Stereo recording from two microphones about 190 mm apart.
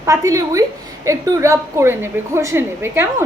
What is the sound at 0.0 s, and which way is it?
A woman's voice, 15° right (ahead or behind).